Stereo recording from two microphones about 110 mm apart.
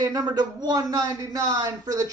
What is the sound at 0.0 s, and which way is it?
Speech, 40° right (ahead or behind).